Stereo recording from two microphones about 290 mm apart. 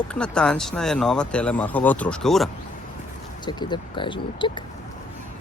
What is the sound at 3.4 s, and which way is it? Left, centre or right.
Speech, centre.